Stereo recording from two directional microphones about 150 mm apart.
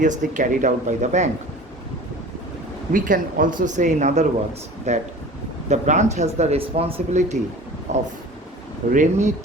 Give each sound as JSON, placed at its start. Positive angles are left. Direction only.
{"t": 0.0, "sound": "speech", "side_deg": -55}
{"t": 2.9, "sound": "speech", "side_deg": -65}